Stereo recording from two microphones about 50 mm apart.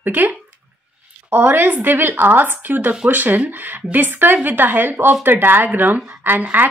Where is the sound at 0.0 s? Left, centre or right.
Right.